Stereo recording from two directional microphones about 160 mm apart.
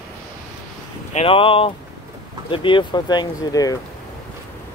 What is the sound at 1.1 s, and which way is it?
Speech, 35° left (ahead or behind).